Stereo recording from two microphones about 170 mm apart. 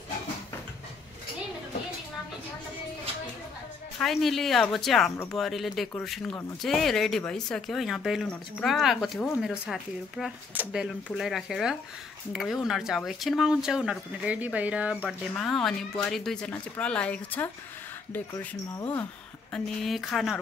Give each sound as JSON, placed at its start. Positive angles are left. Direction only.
{"t": 4.0, "sound": "speech", "side_deg": 0}
{"t": 19.5, "sound": "speech", "side_deg": 0}